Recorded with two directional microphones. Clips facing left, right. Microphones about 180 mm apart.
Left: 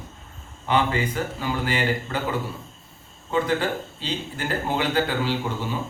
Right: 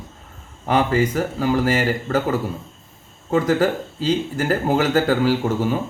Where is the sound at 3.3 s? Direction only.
45° right (ahead or behind).